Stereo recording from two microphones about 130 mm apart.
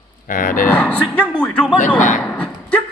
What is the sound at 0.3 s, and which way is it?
Cattle, 90° left.